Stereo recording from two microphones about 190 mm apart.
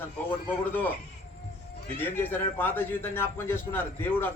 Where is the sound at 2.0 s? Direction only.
10° left (ahead or behind).